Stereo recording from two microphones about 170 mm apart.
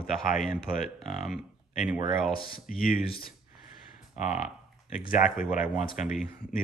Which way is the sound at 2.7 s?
60° left (ahead or behind).